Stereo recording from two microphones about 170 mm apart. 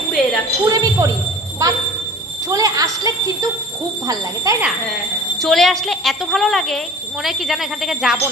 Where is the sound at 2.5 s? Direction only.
20° right (ahead or behind).